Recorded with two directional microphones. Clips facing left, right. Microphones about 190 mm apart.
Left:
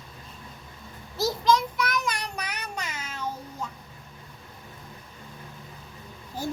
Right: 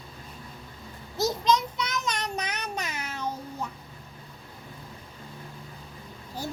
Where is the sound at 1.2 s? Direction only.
20° right (ahead or behind).